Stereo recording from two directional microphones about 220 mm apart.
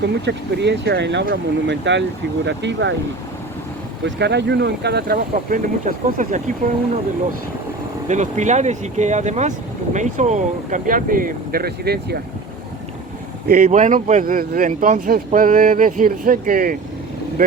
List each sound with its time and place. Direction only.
0.3 s speech: 50° right (ahead or behind)
4.0 s speech: 50° right (ahead or behind); by 6.4 s 35° right (ahead or behind)
8.0 s speech: 35° right (ahead or behind)
13.5 s speech: 40° right (ahead or behind)